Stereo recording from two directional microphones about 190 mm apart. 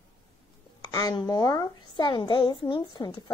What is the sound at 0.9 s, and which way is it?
A child's voice, 20° left (ahead or behind).